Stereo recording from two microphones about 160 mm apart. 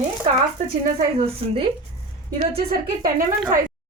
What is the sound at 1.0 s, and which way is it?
Speech, 40° right (ahead or behind).